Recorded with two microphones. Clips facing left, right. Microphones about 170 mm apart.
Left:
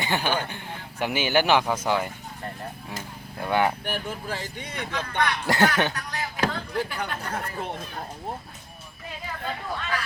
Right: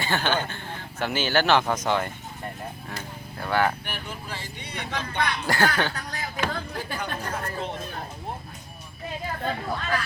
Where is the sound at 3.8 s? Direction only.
45° left (ahead or behind).